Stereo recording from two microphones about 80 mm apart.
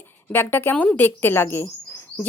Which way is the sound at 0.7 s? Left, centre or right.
Centre.